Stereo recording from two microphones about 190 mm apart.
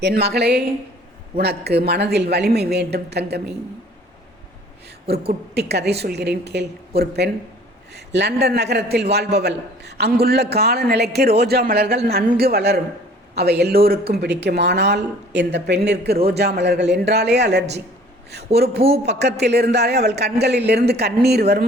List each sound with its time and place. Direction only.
0.0 s speech: 60° right (ahead or behind)
5.5 s speech: 60° right (ahead or behind)